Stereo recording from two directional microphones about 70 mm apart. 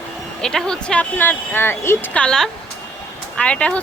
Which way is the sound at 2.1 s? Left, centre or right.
Centre.